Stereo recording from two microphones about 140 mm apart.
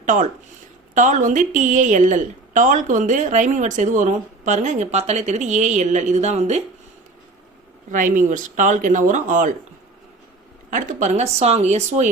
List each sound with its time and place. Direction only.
0.0 s a woman's voice: 65° right (ahead or behind)
7.9 s speech: 65° right (ahead or behind)
10.7 s a woman's voice: 65° right (ahead or behind)